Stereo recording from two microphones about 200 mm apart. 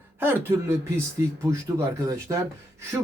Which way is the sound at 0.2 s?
10° right (ahead or behind).